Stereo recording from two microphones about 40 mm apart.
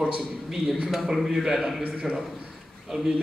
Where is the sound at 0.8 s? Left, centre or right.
Centre.